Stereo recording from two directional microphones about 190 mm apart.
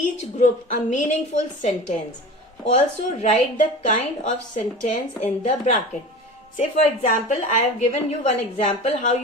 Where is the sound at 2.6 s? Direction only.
35° left (ahead or behind).